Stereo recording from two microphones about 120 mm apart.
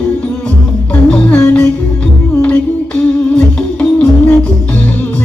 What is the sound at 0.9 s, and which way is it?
Music, 10° left (ahead or behind).